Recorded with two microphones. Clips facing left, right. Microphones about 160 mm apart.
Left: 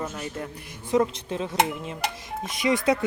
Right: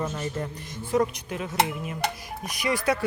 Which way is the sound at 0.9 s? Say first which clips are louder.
Left 2 dB; 25° left (ahead or behind).